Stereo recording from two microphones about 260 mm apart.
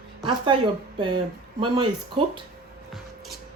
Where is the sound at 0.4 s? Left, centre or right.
Centre.